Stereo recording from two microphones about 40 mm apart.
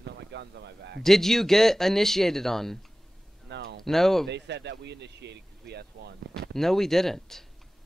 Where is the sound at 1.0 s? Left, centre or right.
Centre.